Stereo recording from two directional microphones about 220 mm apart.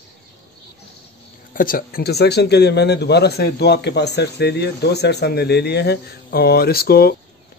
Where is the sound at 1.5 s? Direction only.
40° left (ahead or behind).